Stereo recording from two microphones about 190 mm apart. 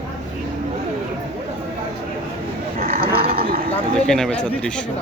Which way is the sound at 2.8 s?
50° right (ahead or behind).